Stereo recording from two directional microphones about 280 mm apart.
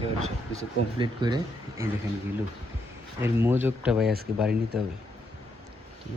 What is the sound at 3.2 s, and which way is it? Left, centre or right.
Speech, centre.